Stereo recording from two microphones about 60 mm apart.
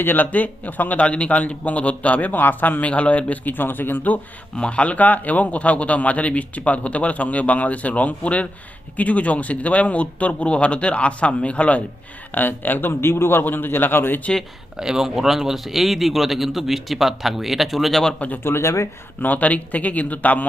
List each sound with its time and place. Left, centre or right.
0.0 s a man's voice: left
4.5 s a man's voice: centre
12.3 s a man's voice: left
14.8 s a man's voice: centre
18.4 s speech: left
19.2 s a man's voice: left